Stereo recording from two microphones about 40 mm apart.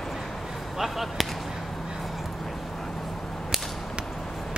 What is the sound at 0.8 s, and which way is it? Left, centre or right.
Basketball bounce, centre.